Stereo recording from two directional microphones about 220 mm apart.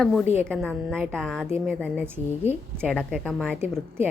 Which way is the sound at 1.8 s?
10° right (ahead or behind).